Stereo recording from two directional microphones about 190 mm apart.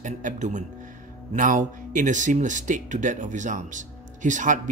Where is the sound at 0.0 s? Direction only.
40° right (ahead or behind).